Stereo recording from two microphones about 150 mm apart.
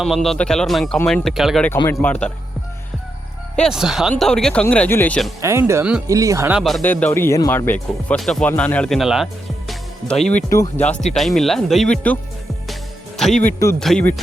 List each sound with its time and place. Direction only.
0.0 s speech: centre (ahead or behind)
1.9 s speech: 10° left (ahead or behind)
3.5 s speech: centre (ahead or behind)
5.4 s speech: 20° right (ahead or behind)
6.5 s speech: centre (ahead or behind)
6.8 s speech: 10° left (ahead or behind)
10.5 s speech: 20° left (ahead or behind)
11.1 s speech: centre (ahead or behind)
13.1 s music: centre (ahead or behind)
13.4 s speech: 20° left (ahead or behind)
13.7 s speech: 5° left (ahead or behind)